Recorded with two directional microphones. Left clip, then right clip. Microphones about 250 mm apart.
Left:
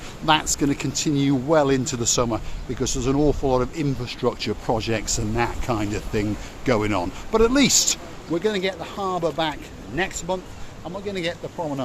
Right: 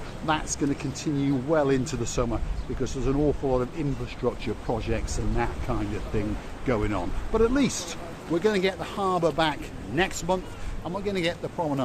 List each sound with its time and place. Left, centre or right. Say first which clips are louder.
0.3 s speech: left 7 dB; left
8.4 s speech: even; centre